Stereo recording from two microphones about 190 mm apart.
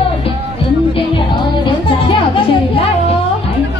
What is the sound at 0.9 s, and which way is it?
Music, 25° left (ahead or behind).